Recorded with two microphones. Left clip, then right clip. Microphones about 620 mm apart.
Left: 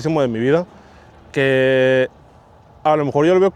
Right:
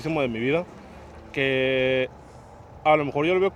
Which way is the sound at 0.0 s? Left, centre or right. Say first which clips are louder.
Left 7 dB; left.